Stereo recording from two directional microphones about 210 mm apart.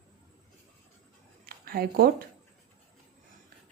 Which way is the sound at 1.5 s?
45° right (ahead or behind).